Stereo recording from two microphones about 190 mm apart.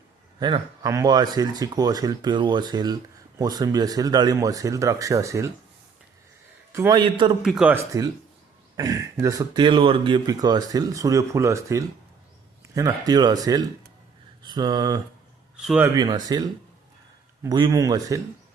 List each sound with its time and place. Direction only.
0.3 s speech: 25° right (ahead or behind)
6.7 s speech: 20° right (ahead or behind)
7.4 s speech: 5° right (ahead or behind); by 15.0 s 20° right (ahead or behind)
15.5 s speech: 5° right (ahead or behind)
16.0 s speech: 20° right (ahead or behind)